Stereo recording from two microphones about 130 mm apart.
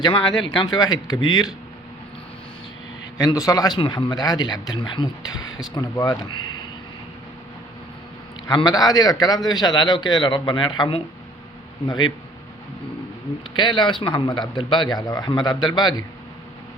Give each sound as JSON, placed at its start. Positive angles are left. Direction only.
{"t": 0.0, "sound": "speech", "side_deg": 40}
{"t": 3.2, "sound": "a man's voice", "side_deg": 25}
{"t": 8.4, "sound": "speech", "side_deg": 30}
{"t": 13.5, "sound": "speech", "side_deg": 35}